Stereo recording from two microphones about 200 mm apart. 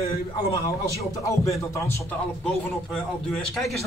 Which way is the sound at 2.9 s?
Centre (ahead or behind).